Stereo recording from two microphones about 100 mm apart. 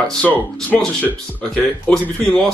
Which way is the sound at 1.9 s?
5° left (ahead or behind).